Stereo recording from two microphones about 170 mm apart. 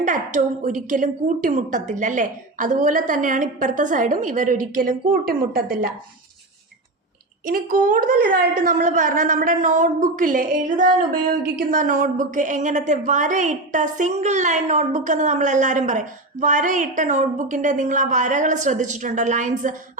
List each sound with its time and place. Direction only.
0.0 s a woman's voice: 50° right (ahead or behind)
7.4 s a woman's voice: 55° right (ahead or behind)